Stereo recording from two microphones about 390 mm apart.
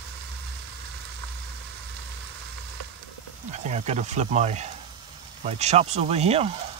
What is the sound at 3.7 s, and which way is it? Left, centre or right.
Speech, centre.